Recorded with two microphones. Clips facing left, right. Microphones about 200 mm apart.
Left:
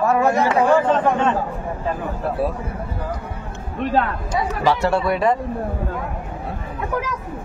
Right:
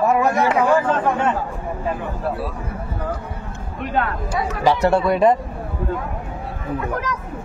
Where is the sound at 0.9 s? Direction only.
10° right (ahead or behind).